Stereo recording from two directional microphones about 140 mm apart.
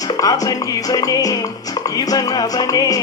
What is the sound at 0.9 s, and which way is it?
Music, 25° left (ahead or behind).